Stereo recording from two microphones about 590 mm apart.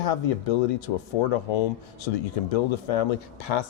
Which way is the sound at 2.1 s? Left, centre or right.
Left.